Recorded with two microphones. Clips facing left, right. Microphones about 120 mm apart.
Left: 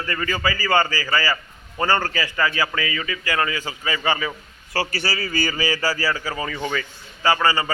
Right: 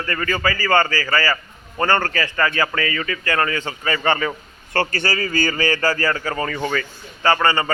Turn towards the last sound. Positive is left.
turn(degrees=10)  # may be behind; listen again after turning